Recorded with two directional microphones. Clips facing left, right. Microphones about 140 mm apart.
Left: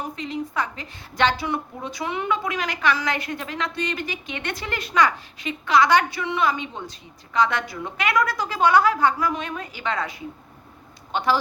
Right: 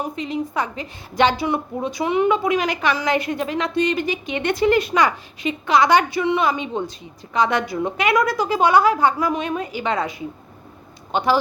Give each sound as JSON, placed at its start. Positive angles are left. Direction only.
{"t": 0.0, "sound": "a woman's voice", "side_deg": -15}